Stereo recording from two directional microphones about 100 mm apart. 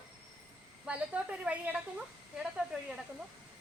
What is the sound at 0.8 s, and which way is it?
Speech, 10° right (ahead or behind).